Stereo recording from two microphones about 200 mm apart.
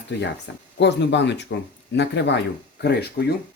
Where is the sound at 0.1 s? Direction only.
60° left (ahead or behind).